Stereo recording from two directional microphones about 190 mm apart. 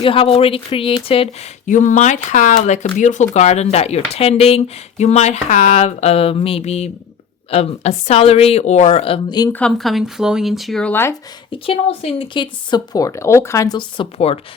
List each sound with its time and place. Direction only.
0.0 s speech: 30° left (ahead or behind)
1.6 s speech: 40° left (ahead or behind); by 9.5 s 25° left (ahead or behind)
9.5 s speech: 5° left (ahead or behind)
11.6 s speech: 30° left (ahead or behind)